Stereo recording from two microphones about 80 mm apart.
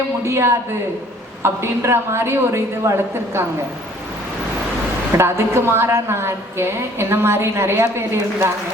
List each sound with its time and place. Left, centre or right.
0.3 s a woman's voice: right
5.1 s a woman's voice: right